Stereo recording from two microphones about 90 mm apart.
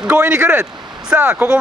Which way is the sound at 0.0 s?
15° right (ahead or behind).